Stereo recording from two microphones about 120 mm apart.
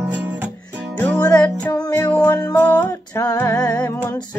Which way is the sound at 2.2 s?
35° left (ahead or behind).